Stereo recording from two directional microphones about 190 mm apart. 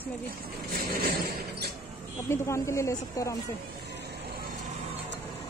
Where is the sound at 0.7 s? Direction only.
50° right (ahead or behind).